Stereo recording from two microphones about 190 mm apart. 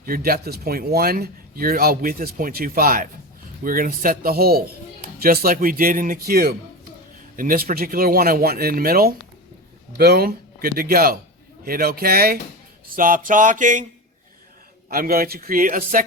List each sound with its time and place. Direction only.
0.0 s speech: 50° right (ahead or behind)
14.8 s speech: 50° right (ahead or behind)